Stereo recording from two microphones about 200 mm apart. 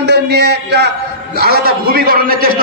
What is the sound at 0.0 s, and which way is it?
A man's voice, 55° right (ahead or behind).